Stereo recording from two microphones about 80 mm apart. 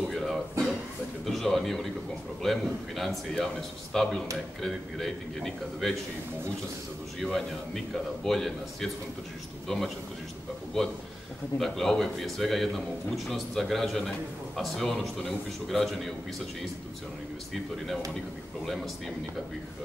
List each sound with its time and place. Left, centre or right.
0.1 s a sound: centre
1.2 s a man's voice: centre
7.2 s a man's voice: centre
11.5 s a man's voice: centre